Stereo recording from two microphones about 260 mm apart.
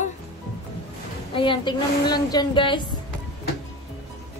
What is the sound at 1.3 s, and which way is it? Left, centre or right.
Speech, centre.